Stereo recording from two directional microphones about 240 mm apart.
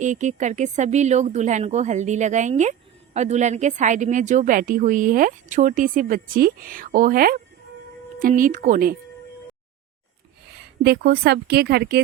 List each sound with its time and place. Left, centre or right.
0.0 s a woman's voice: right
10.8 s a woman's voice: right